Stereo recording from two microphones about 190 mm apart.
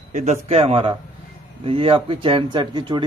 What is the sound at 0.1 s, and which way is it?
Speech, 40° right (ahead or behind).